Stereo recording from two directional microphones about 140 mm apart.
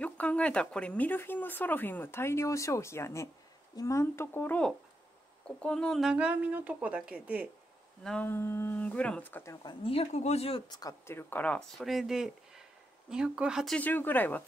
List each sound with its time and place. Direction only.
0.0 s speech: 10° left (ahead or behind); by 7.4 s 10° right (ahead or behind)
8.0 s speech: 5° left (ahead or behind)
8.3 s speech: 15° left (ahead or behind)
9.6 s speech: 40° left (ahead or behind)
10.7 s speech: 25° left (ahead or behind); by 13.7 s 5° right (ahead or behind)
13.7 s speech: 15° left (ahead or behind)